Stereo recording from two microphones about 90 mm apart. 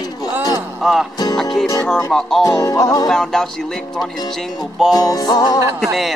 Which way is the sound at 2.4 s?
40° left (ahead or behind).